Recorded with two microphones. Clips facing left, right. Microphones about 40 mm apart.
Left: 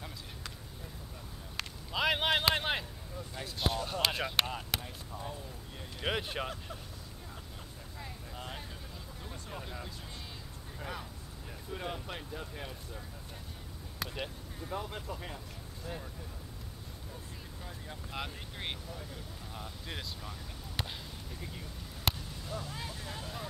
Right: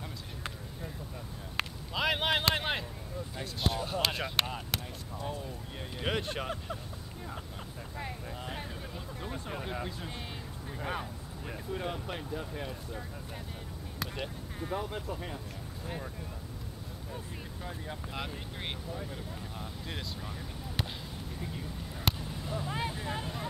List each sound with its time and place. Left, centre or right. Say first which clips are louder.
1.9 s a sound: left 1 dB; centre
3.3 s speech: even; centre
6.0 s speech: right 1 dB; centre
9.2 s speech: right 6 dB; right
11.7 s speech: right 3 dB; centre
13.9 s speech: right 1 dB; centre
15.8 s speech: right 2 dB; right
18.1 s speech: left 2 dB; centre
21.4 s vehicle: right 5 dB; centre
22.2 s a sound: right 4 dB; centre
22.7 s speech: right 7 dB; right